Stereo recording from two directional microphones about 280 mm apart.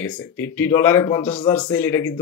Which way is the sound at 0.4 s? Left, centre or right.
Centre.